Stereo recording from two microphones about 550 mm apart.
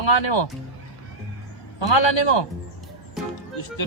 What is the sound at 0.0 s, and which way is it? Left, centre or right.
Speech, left.